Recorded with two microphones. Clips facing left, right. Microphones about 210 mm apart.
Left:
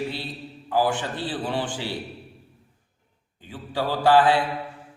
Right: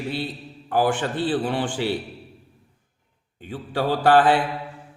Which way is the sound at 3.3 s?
55° right (ahead or behind).